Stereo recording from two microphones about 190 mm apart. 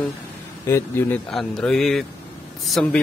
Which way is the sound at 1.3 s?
Centre (ahead or behind).